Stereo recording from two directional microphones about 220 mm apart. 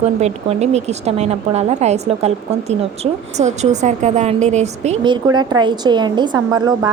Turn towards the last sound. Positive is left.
turn(degrees=-20)  # may be behind; listen again after turning